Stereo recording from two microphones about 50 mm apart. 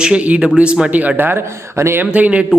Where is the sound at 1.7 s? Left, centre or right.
Right.